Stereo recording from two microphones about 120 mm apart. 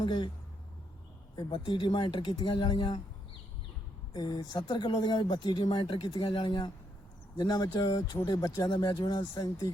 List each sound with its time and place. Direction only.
0.0 s speech: 40° left (ahead or behind)
1.4 s speech: 40° left (ahead or behind)
4.1 s speech: 35° left (ahead or behind)